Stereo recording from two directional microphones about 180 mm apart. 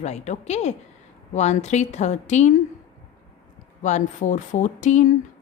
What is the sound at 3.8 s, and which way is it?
Speech, 45° left (ahead or behind).